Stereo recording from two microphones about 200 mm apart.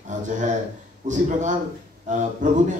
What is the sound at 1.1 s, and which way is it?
A man's voice, 40° right (ahead or behind).